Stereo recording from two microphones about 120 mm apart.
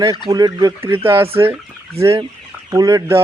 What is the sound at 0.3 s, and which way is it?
Speech, 35° right (ahead or behind).